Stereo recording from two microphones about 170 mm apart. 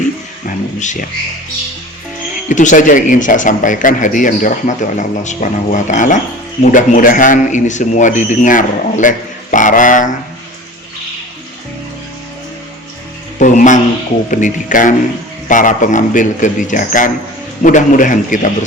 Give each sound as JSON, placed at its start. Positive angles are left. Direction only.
{"t": 0.4, "sound": "a sound", "side_deg": 45}
{"t": 2.5, "sound": "speech", "side_deg": 50}
{"t": 13.4, "sound": "music", "side_deg": 45}
{"t": 14.3, "sound": "speech", "side_deg": 50}